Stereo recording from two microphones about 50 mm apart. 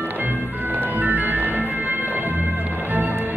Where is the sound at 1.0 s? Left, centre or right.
Right.